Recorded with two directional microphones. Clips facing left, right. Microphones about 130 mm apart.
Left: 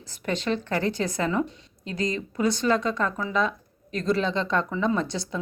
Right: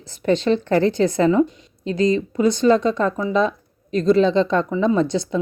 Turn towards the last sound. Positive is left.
turn(degrees=-20)  # may be behind; listen again after turning